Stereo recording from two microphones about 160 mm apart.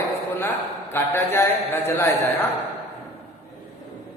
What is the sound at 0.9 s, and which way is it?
A man's voice, 15° left (ahead or behind).